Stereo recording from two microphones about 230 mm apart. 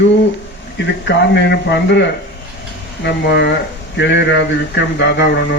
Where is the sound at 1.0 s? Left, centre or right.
Left.